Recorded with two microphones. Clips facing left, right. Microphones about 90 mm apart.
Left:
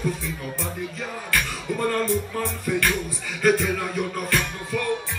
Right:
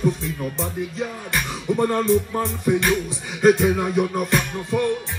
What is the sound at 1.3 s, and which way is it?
Beatboxing, 20° right (ahead or behind).